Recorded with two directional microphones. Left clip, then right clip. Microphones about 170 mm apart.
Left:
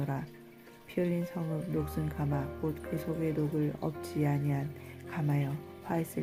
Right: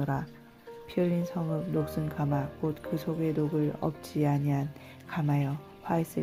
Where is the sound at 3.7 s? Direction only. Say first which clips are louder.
Right 3 dB; 20° right (ahead or behind).